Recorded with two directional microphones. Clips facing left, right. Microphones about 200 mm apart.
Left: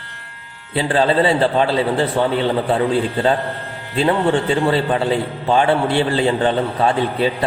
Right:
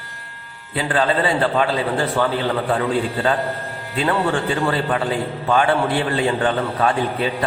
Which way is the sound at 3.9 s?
25° left (ahead or behind).